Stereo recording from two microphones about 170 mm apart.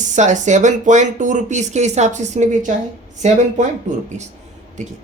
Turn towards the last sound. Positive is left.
turn(degrees=-45)  # may be behind; listen again after turning